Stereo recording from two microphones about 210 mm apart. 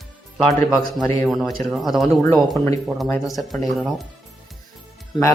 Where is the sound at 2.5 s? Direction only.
15° left (ahead or behind).